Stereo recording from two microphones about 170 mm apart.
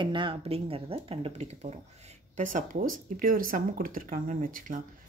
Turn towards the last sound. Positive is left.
turn(degrees=-50)  # may be behind; listen again after turning